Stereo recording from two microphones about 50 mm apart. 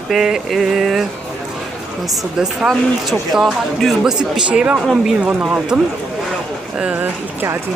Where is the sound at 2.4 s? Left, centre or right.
Centre.